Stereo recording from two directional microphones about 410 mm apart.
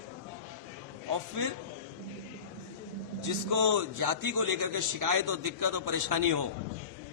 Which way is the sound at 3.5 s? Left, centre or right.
Right.